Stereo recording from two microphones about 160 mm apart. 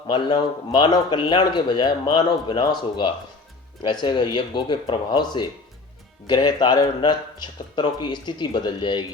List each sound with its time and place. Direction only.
0.1 s a man's voice: 25° left (ahead or behind)